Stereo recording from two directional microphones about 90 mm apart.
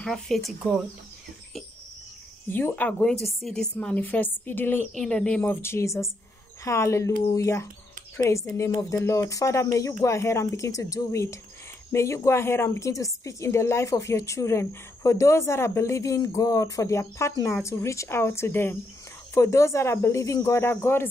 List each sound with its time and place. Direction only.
0.0 s a woman's voice: 5° left (ahead or behind)
2.5 s speech: 20° left (ahead or behind)
3.2 s a woman's voice: centre (ahead or behind)
3.8 s a woman's voice: 15° left (ahead or behind)